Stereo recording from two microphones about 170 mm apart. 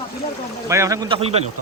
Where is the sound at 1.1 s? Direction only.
35° right (ahead or behind).